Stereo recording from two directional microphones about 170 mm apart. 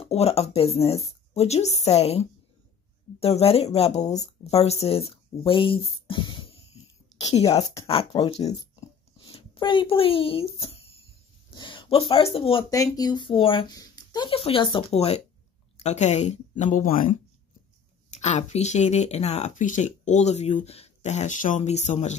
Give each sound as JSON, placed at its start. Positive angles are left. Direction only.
{"t": 0.0, "sound": "a woman's voice", "side_deg": 35}
{"t": 7.4, "sound": "speech", "side_deg": 20}
{"t": 7.9, "sound": "speech", "side_deg": 30}